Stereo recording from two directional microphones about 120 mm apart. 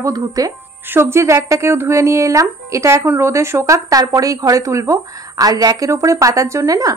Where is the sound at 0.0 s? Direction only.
30° right (ahead or behind).